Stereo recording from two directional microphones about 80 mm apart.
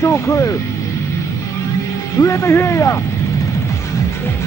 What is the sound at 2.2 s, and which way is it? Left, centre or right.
Speech, left.